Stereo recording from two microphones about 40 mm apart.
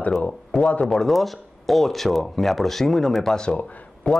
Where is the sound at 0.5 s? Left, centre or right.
Centre.